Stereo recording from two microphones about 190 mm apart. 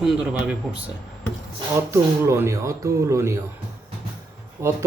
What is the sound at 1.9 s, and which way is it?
A man's voice, 15° right (ahead or behind).